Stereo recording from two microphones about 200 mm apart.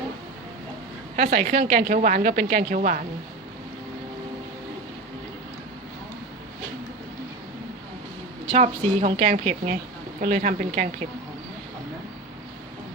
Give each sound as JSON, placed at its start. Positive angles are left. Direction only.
{"t": 1.1, "sound": "a woman's voice", "side_deg": -40}
{"t": 8.5, "sound": "a woman's voice", "side_deg": -35}